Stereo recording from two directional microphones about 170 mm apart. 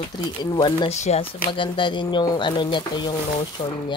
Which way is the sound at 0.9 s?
40° left (ahead or behind).